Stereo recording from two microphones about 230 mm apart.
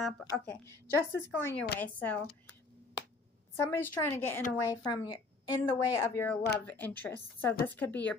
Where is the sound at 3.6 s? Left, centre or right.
Centre.